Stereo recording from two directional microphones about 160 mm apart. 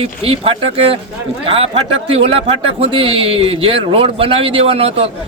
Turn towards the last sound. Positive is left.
turn(degrees=-40)  # may be behind; listen again after turning